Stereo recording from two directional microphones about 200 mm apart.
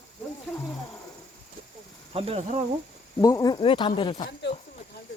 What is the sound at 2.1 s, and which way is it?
Speech, 30° right (ahead or behind).